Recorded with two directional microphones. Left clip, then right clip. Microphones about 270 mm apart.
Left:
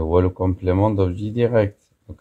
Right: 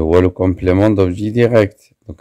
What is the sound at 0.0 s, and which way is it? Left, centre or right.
Speech, right.